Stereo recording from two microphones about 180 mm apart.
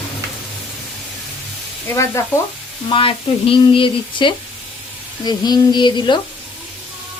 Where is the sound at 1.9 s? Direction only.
15° left (ahead or behind).